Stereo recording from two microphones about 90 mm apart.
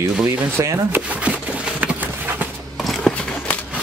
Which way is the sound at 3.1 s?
15° left (ahead or behind).